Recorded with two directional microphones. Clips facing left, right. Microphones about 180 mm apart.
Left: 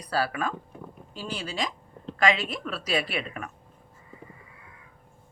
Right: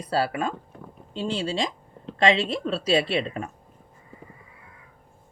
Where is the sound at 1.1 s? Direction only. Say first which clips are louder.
Right 8 dB; 25° right (ahead or behind).